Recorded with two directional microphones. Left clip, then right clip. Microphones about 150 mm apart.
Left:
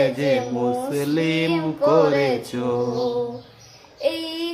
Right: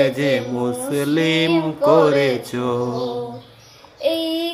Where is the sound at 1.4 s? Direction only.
10° right (ahead or behind).